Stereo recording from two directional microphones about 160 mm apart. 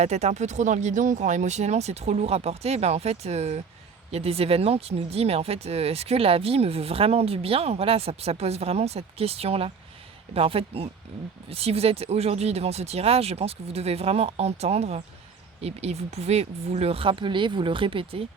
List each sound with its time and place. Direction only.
0.0 s speech: 45° right (ahead or behind)